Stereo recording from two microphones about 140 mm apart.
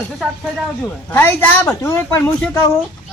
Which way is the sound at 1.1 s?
15° left (ahead or behind).